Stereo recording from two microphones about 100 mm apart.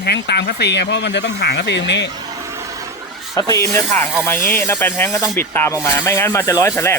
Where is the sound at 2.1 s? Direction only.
35° right (ahead or behind).